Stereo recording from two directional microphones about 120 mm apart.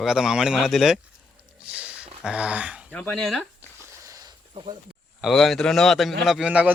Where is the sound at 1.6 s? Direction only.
10° right (ahead or behind).